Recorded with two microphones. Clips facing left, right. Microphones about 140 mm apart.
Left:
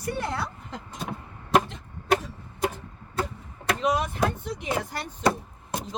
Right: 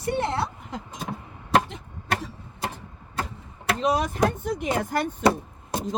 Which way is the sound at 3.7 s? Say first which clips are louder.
Right 3 dB; 35° right (ahead or behind).